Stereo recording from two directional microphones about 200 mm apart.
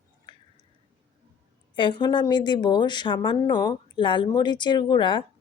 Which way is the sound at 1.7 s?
20° left (ahead or behind).